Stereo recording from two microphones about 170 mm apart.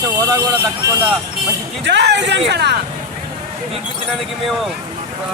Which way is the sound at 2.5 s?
80° right.